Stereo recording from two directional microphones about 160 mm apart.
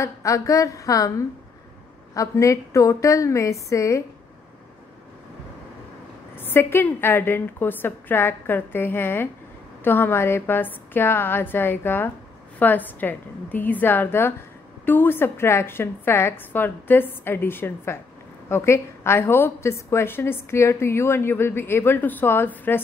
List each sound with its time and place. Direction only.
0.0 s a woman's voice: 20° left (ahead or behind)
2.1 s a woman's voice: 20° left (ahead or behind)
6.3 s a woman's voice: 15° left (ahead or behind)